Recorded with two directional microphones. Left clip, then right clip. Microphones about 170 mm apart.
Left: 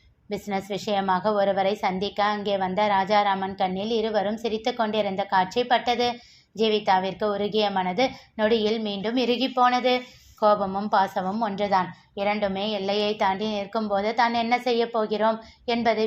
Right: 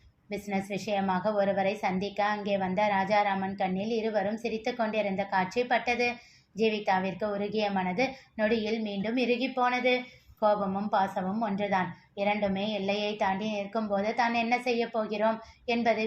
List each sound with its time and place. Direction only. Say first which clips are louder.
0.3 s a woman's voice: left 5 dB; 15° left (ahead or behind)